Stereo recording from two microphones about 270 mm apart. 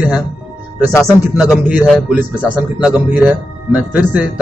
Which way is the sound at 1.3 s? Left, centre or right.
Centre.